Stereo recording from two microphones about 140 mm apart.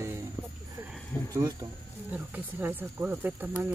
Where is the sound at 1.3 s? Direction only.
25° right (ahead or behind).